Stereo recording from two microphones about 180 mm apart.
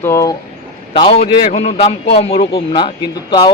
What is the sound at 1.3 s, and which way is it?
A man's voice, 35° left (ahead or behind).